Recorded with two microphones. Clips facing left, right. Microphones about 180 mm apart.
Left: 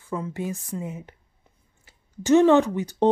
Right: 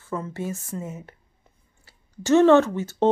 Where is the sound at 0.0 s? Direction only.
15° left (ahead or behind).